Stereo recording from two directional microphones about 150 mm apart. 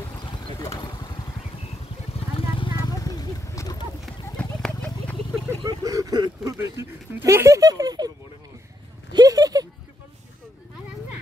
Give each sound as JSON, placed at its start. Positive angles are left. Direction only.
{"t": 0.2, "sound": "vehicle", "side_deg": 30}
{"t": 2.1, "sound": "vehicle", "side_deg": 35}
{"t": 2.9, "sound": "a sound", "side_deg": 25}
{"t": 4.0, "sound": "horse", "side_deg": 5}
{"t": 5.6, "sound": "vehicle", "side_deg": -25}
{"t": 6.6, "sound": "speech", "side_deg": -20}
{"t": 9.1, "sound": "a sound", "side_deg": -25}